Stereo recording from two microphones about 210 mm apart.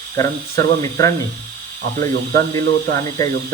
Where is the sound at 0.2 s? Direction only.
15° left (ahead or behind).